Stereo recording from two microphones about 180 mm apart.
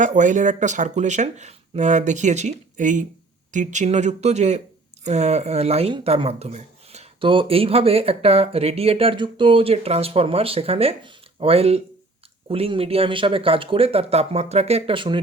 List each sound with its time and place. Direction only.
0.0 s speech: 45° right (ahead or behind); by 15.2 s 30° right (ahead or behind)